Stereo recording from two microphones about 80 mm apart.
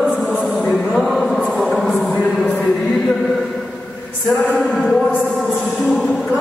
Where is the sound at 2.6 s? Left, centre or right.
Centre.